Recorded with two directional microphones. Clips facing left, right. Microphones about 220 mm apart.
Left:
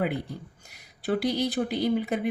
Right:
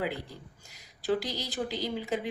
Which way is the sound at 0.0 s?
60° left (ahead or behind).